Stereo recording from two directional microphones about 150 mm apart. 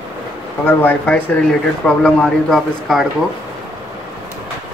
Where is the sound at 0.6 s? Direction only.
10° left (ahead or behind).